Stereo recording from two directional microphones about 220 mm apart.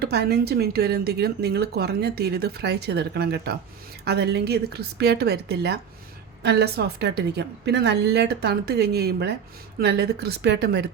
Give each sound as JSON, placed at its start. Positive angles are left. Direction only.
{"t": 0.0, "sound": "speech", "side_deg": -50}